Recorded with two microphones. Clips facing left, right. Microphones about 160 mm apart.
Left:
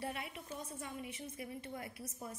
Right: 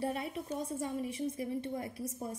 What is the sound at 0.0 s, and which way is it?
A woman's voice, 30° right (ahead or behind).